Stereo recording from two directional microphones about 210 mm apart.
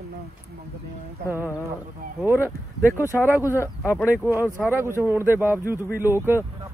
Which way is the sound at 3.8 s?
10° left (ahead or behind).